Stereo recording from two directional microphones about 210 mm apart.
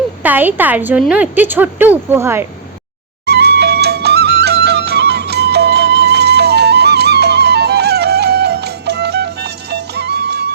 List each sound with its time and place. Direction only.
0.2 s a woman's voice: 10° right (ahead or behind)
3.2 s music: 50° right (ahead or behind)